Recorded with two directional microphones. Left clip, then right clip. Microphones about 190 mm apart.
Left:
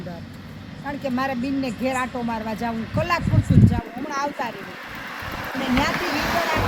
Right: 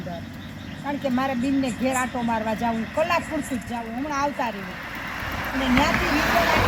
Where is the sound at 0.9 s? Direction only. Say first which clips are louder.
Even; 30° left (ahead or behind).